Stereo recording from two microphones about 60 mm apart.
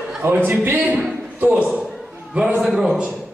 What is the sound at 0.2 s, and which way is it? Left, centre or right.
Speech, right.